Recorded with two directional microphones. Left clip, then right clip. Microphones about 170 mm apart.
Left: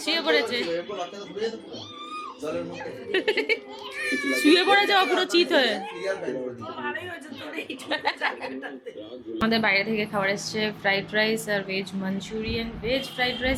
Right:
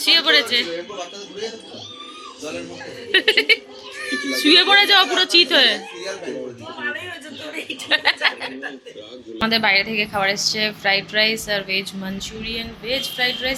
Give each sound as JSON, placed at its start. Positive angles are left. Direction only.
{"t": 0.0, "sound": "a woman's voice", "side_deg": 5}
{"t": 3.1, "sound": "a woman's voice", "side_deg": 5}
{"t": 7.9, "sound": "a woman's voice", "side_deg": 5}